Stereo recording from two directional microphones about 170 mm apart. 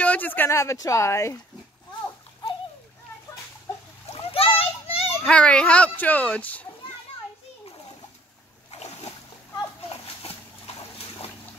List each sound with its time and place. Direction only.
0.0 s speech: 10° left (ahead or behind)
4.1 s splash: 35° left (ahead or behind)
5.2 s speech: 5° left (ahead or behind)
8.7 s splash: 40° left (ahead or behind)